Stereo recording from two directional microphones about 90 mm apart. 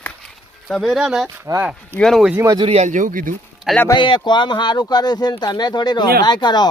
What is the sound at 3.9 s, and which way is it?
Speech, 60° left (ahead or behind).